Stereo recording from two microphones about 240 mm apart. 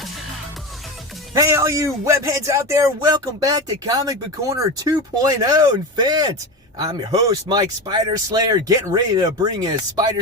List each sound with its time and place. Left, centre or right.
1.3 s speech: centre